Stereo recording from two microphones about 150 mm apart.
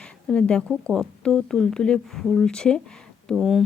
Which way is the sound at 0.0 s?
5° left (ahead or behind).